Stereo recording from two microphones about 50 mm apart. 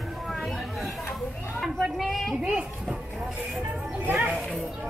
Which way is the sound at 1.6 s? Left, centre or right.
Centre.